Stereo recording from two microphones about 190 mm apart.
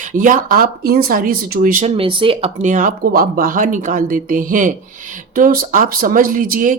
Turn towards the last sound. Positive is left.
turn(degrees=-45)  # may be behind; listen again after turning